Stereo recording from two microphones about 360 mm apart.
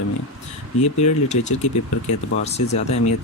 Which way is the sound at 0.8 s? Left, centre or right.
Centre.